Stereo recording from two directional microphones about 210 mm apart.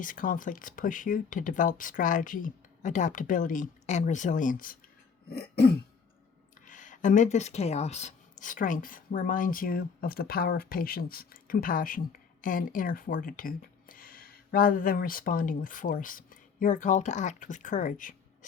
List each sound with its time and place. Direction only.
0.0 s speech: 40° left (ahead or behind)
6.7 s speech: 40° left (ahead or behind)